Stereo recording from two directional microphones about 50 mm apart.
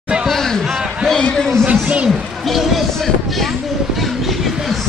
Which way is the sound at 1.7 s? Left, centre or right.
Right.